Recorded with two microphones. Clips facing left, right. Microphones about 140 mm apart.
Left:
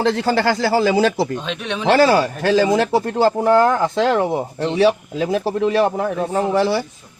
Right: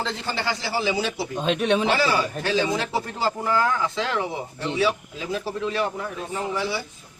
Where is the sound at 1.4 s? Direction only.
40° right (ahead or behind).